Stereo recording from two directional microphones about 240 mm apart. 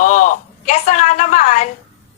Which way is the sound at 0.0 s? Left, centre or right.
Left.